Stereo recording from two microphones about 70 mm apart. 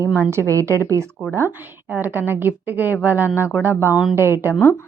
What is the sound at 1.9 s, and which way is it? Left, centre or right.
A woman's voice, right.